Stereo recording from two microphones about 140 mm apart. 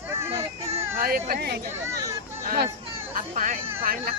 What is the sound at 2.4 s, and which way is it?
Speech, 90° right.